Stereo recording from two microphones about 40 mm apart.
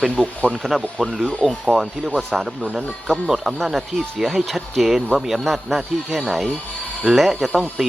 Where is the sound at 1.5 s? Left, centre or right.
Centre.